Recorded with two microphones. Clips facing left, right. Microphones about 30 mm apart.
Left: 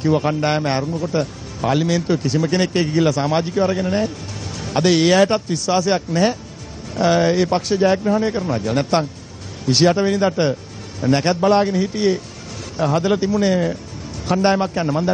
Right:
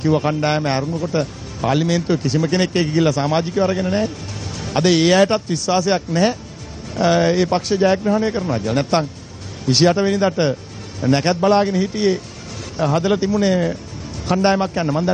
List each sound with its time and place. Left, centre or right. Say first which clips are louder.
0.0 s a man's voice: even; centre